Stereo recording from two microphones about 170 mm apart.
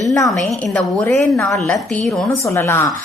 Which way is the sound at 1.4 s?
Centre (ahead or behind).